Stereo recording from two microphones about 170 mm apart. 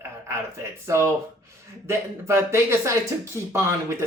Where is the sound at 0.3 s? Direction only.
15° right (ahead or behind).